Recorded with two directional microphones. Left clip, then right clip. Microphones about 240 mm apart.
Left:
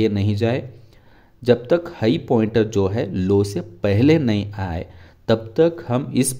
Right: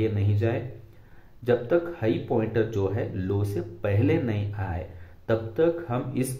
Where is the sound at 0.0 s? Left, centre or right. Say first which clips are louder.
Left 7 dB; left.